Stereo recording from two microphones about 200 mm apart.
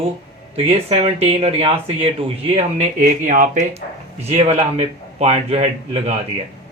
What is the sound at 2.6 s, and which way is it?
A man's voice, 40° right (ahead or behind).